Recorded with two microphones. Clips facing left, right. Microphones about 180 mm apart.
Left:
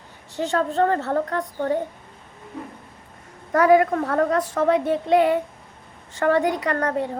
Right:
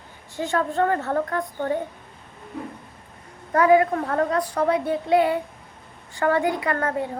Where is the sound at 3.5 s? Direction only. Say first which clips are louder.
Left 1 dB; 40° left (ahead or behind).